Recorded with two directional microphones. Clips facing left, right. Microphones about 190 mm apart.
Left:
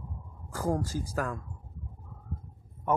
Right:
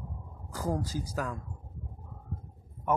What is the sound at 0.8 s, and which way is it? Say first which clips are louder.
Speech: left 2 dB; 50° left (ahead or behind).